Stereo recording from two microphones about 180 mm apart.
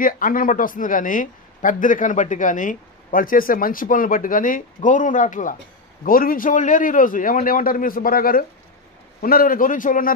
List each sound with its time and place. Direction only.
0.0 s speech: 50° left (ahead or behind)